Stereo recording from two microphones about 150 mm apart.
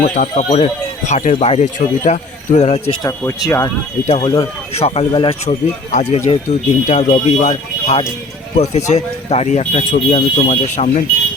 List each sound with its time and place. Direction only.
0.0 s speech: 55° left (ahead or behind)
3.0 s speech: 20° left (ahead or behind)
4.0 s speech: 50° left (ahead or behind)
10.5 s speech: 55° left (ahead or behind)